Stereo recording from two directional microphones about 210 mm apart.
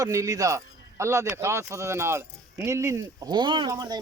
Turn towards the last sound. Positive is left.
turn(degrees=-20)  # may be behind; listen again after turning